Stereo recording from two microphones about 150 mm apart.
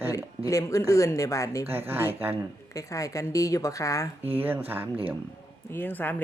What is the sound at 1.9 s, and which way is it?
Speech, 15° right (ahead or behind).